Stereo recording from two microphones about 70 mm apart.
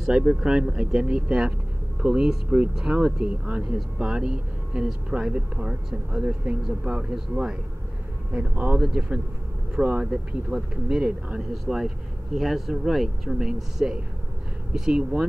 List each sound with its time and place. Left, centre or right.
0.0 s speech: centre